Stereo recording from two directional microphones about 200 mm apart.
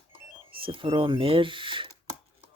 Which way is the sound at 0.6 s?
25° right (ahead or behind).